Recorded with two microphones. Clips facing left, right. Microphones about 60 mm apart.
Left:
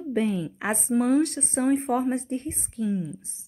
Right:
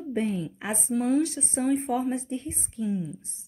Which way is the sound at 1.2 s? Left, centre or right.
Left.